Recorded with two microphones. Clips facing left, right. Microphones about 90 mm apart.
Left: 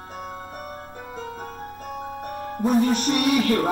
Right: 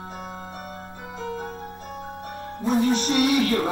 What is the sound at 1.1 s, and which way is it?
Music, 45° left (ahead or behind).